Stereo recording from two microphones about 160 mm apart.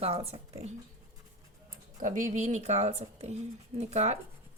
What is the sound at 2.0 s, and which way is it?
Speech, 55° right (ahead or behind).